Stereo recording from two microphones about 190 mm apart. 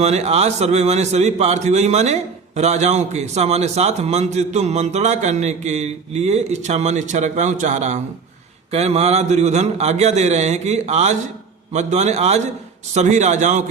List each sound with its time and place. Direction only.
0.0 s a man's voice: 35° right (ahead or behind)